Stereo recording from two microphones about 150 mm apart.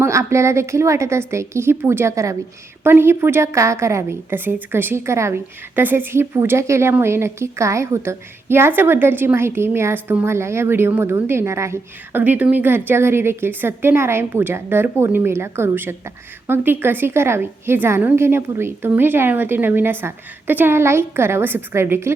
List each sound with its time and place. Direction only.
0.0 s a woman's voice: 20° right (ahead or behind)